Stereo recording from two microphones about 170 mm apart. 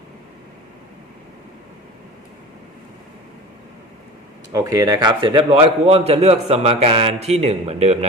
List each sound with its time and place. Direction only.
4.5 s a man's voice: 20° right (ahead or behind); by 7.9 s 40° right (ahead or behind)